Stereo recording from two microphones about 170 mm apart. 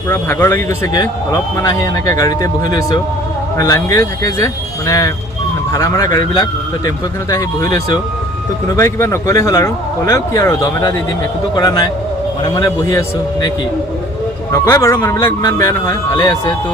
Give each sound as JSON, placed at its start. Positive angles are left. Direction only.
{"t": 0.1, "sound": "a man's voice", "side_deg": 15}
{"t": 14.5, "sound": "a man's voice", "side_deg": 20}